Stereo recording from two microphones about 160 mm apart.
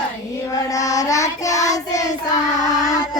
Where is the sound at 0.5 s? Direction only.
20° left (ahead or behind).